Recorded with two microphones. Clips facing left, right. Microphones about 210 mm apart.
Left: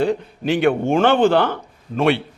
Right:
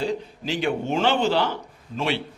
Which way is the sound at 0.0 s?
60° left (ahead or behind).